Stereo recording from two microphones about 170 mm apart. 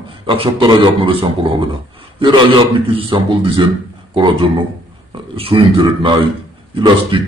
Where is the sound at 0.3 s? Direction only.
30° right (ahead or behind).